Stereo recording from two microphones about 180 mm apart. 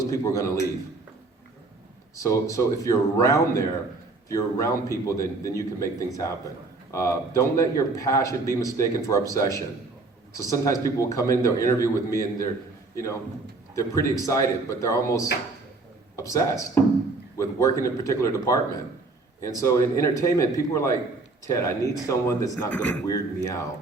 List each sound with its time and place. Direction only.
0.0 s a man's voice: 15° left (ahead or behind)
2.1 s a man's voice: 20° left (ahead or behind)
13.7 s a man's voice: 15° left (ahead or behind)
23.0 s speech: 20° left (ahead or behind)